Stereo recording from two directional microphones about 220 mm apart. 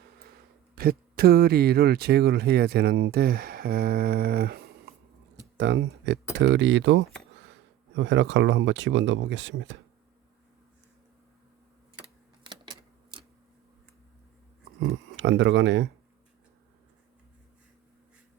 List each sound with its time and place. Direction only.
0.8 s speech: 45° right (ahead or behind)
14.8 s speech: 60° right (ahead or behind)